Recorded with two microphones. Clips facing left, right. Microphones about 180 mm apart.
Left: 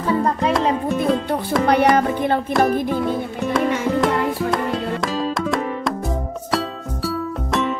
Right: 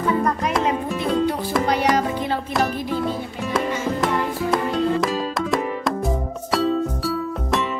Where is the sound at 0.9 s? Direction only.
55° left (ahead or behind).